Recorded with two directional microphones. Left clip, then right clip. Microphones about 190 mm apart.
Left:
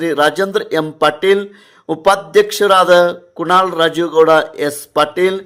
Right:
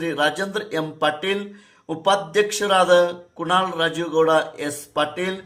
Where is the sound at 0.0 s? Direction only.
40° left (ahead or behind).